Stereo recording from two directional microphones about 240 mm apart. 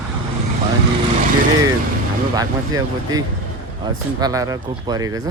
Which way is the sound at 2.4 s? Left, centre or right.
Centre.